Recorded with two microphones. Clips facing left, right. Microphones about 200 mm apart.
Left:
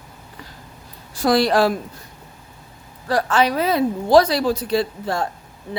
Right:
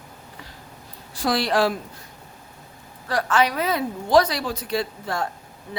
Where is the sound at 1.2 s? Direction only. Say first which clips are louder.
Left 5 dB; 40° left (ahead or behind).